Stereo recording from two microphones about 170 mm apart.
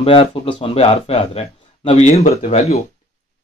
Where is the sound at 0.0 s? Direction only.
30° left (ahead or behind).